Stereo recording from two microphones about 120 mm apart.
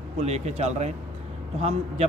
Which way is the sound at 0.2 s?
60° right (ahead or behind).